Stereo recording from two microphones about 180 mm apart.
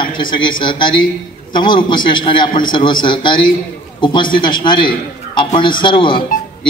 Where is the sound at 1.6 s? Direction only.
25° left (ahead or behind).